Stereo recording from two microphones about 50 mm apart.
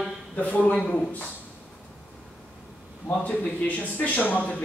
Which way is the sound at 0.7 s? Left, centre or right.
Centre.